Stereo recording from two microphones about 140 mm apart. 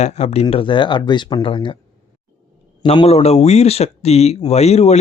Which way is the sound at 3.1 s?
50° left (ahead or behind).